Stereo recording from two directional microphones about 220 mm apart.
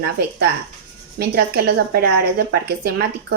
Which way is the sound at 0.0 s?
45° right (ahead or behind).